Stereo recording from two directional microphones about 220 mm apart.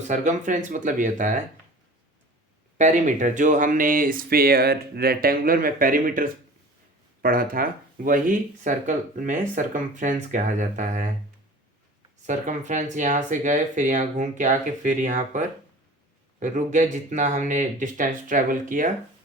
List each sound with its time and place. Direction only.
0.1 s speech: 35° right (ahead or behind)
2.7 s speech: 35° right (ahead or behind)
12.2 s speech: 35° right (ahead or behind)